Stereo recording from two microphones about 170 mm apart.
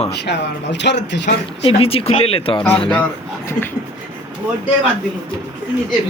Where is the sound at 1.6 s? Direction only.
35° left (ahead or behind).